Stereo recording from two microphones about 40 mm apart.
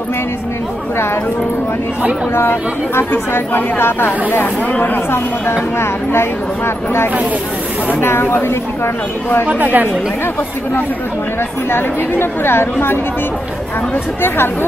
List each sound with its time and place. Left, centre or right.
2.3 s a woman's voice: left
3.3 s speech: left
4.7 s speech: left
5.1 s speech: left
8.0 s speech: left
9.5 s speech: right
11.7 s a woman's voice: left
14.2 s a woman's voice: left